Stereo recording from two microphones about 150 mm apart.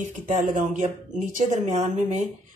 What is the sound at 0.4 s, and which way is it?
Speech, 55° right (ahead or behind).